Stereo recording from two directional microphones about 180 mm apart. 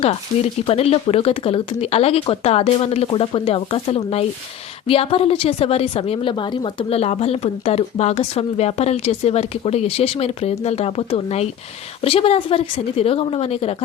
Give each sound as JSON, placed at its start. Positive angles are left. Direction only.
{"t": 0.0, "sound": "a woman's voice", "side_deg": 35}